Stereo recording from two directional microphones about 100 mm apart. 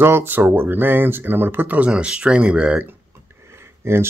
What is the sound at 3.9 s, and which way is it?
Speech, 25° right (ahead or behind).